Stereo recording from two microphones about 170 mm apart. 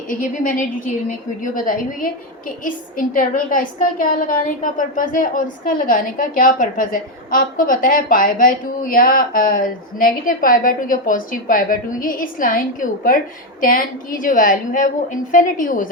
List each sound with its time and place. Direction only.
0.1 s a woman's voice: 50° left (ahead or behind)